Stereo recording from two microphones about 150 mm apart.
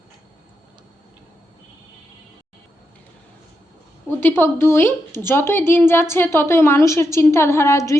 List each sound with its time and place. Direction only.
4.2 s a woman's voice: 15° left (ahead or behind)